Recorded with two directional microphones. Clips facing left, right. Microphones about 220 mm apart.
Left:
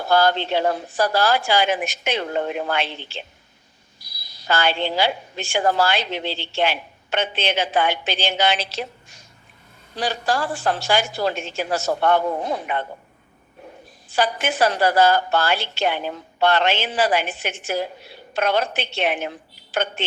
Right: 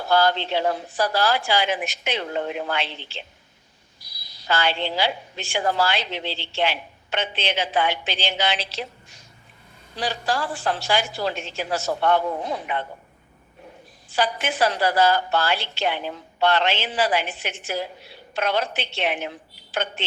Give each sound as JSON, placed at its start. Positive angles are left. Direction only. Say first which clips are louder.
{"t": 0.1, "sound": "a woman's voice", "louder": "left 2 dB", "side_deg": 45}
{"t": 4.3, "sound": "a woman's voice", "louder": "left 2 dB", "side_deg": 45}
{"t": 14.1, "sound": "a woman's voice", "louder": "left 2 dB", "side_deg": 45}